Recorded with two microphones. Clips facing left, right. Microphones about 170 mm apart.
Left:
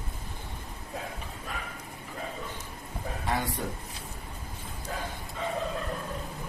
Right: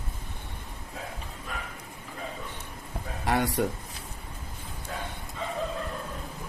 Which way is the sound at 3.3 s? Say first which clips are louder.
Right 6 dB; 75° right (ahead or behind).